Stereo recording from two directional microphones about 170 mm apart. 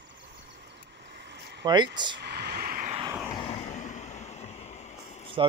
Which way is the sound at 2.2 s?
70° right (ahead or behind).